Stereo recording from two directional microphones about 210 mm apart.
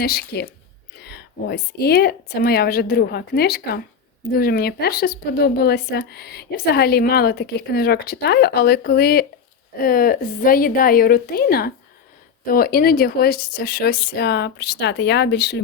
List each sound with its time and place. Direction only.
0.0 s speech: 50° left (ahead or behind)